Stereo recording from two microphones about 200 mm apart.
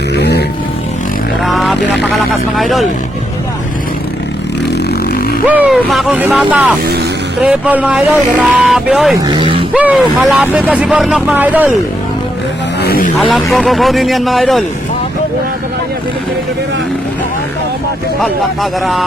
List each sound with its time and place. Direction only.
0.2 s vehicle: 55° left (ahead or behind)
1.5 s speech: centre (ahead or behind)
5.5 s speech: 5° right (ahead or behind)
9.1 s speech: 20° right (ahead or behind)
9.7 s speech: 5° right (ahead or behind)
12.8 s vehicle: 50° left (ahead or behind)
13.1 s speech: centre (ahead or behind)
18.2 s speech: centre (ahead or behind)